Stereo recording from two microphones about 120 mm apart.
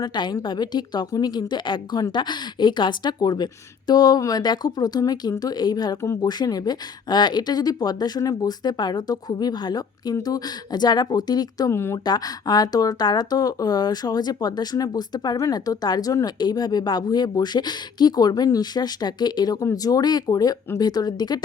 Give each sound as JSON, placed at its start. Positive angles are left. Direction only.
{"t": 0.0, "sound": "a woman's voice", "side_deg": 35}
{"t": 12.0, "sound": "a woman's voice", "side_deg": 35}